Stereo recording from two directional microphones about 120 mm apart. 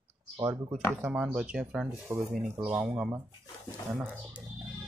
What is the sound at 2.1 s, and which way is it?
Speech, 20° right (ahead or behind).